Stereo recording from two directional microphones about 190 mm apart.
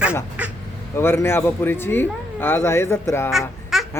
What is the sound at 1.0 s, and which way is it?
A man's voice, 10° left (ahead or behind).